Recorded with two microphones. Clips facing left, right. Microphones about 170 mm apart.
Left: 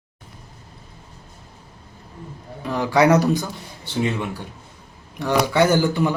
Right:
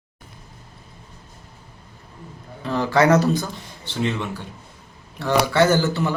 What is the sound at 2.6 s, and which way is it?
Speech, 15° left (ahead or behind).